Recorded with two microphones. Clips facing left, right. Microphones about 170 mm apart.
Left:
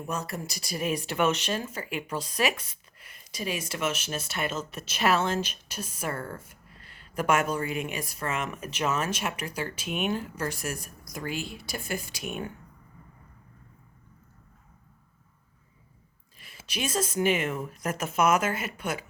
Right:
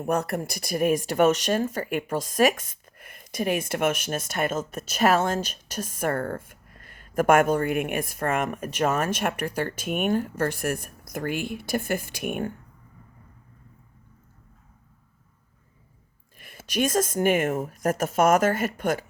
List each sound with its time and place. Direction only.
0.0 s speech: 55° right (ahead or behind)
16.4 s speech: 50° right (ahead or behind)